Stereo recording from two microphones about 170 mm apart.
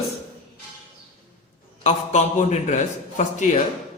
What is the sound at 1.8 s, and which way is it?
A man's voice, 45° left (ahead or behind).